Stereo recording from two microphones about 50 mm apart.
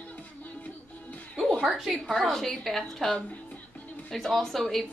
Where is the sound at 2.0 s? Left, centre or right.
Centre.